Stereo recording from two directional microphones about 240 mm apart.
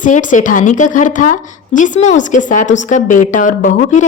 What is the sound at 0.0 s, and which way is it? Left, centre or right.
A woman's voice, left.